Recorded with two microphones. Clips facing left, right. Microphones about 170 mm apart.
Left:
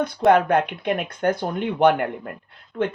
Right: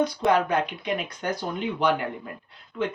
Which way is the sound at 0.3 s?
55° left (ahead or behind).